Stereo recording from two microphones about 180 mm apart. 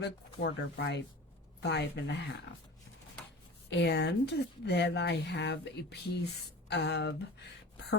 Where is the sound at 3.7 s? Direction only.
70° left (ahead or behind).